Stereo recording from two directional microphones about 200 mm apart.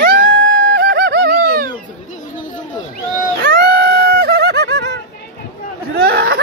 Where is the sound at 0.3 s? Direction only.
55° right (ahead or behind).